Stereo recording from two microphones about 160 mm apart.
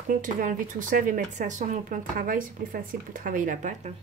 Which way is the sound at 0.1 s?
55° right (ahead or behind).